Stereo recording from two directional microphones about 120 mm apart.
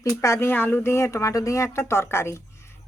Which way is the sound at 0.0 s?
25° left (ahead or behind).